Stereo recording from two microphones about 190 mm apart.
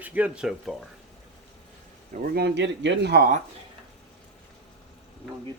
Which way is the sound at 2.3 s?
65° right (ahead or behind).